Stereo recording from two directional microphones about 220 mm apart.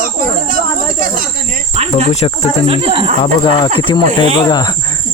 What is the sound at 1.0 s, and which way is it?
Snake, 40° right (ahead or behind).